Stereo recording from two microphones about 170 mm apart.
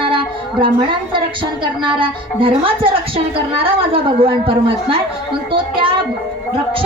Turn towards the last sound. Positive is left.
turn(degrees=-30)  # may be behind; listen again after turning